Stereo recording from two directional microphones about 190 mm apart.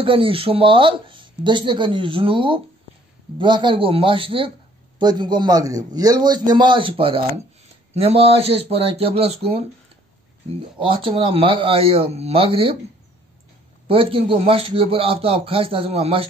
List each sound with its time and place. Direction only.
0.0 s speech: 30° right (ahead or behind)
10.8 s speech: 30° right (ahead or behind)
13.8 s speech: 30° right (ahead or behind)